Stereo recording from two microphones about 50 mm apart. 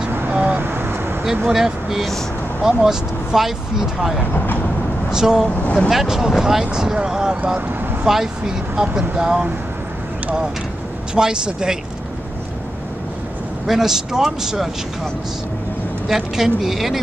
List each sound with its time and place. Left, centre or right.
0.6 s vehicle: right
1.2 s speech: centre
4.3 s speech: left
5.1 s speech: centre
5.6 s speech: left
5.9 s speech: centre
11.1 s speech: centre
13.7 s speech: centre
16.1 s speech: centre